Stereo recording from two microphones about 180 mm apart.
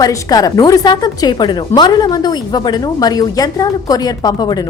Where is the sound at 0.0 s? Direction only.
20° left (ahead or behind).